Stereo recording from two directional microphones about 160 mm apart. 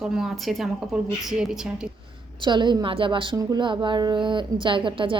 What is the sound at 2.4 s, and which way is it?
A woman's voice, 30° right (ahead or behind).